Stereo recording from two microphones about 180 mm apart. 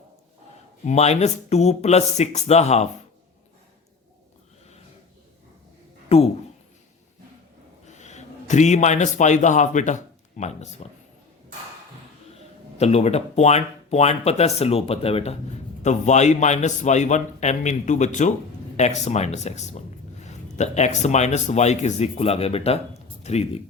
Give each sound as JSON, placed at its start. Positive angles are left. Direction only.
{"t": 0.9, "sound": "speech", "side_deg": 35}
{"t": 6.1, "sound": "speech", "side_deg": 35}
{"t": 7.9, "sound": "a man's voice", "side_deg": 40}
{"t": 12.7, "sound": "speech", "side_deg": 35}